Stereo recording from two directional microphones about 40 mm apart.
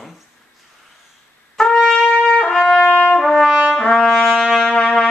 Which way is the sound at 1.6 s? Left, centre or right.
Centre.